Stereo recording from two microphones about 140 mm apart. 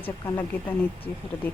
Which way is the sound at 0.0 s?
15° left (ahead or behind).